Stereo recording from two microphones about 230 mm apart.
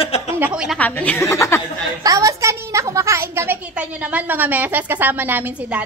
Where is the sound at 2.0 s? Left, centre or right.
Centre.